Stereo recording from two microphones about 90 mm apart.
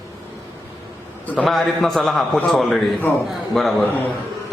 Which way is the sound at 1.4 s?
Centre (ahead or behind).